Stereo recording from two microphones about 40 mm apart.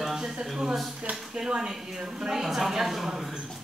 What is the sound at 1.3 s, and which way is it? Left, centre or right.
A man's voice, right.